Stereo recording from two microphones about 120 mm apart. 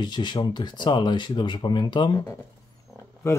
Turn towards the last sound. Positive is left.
turn(degrees=25)  # may be behind; listen again after turning